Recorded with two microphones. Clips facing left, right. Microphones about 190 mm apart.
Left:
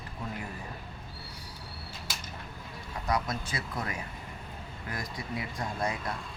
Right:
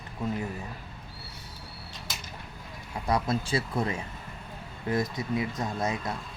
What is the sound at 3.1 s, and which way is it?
Speech, 30° right (ahead or behind).